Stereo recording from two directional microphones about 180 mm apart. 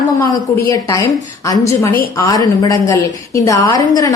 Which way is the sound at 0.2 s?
15° left (ahead or behind).